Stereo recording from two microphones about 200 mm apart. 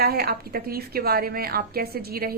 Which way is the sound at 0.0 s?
50° right (ahead or behind).